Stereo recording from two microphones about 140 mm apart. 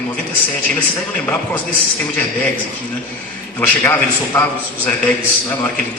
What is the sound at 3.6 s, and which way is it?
Speech, 15° left (ahead or behind).